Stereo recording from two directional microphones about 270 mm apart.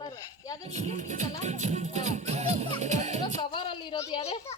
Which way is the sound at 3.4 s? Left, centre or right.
Centre.